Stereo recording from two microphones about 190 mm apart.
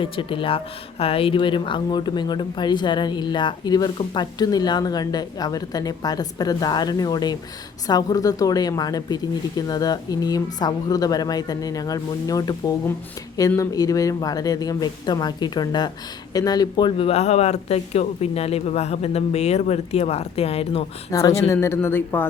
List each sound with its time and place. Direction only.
0.0 s speech: 25° left (ahead or behind)
21.1 s speech: 20° left (ahead or behind)